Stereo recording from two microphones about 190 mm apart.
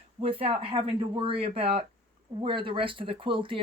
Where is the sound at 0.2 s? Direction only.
30° right (ahead or behind).